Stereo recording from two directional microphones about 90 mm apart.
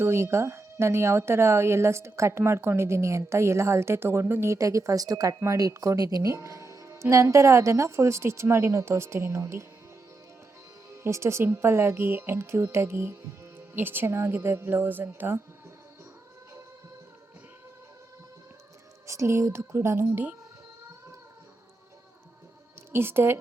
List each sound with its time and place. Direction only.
0.0 s speech: 30° right (ahead or behind)
4.5 s speech: 35° right (ahead or behind)
10.9 s speech: 30° right (ahead or behind)
19.0 s speech: 35° right (ahead or behind)
22.9 s speech: 25° right (ahead or behind)